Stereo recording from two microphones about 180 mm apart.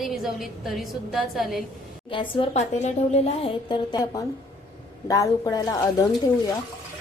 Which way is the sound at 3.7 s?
20° left (ahead or behind).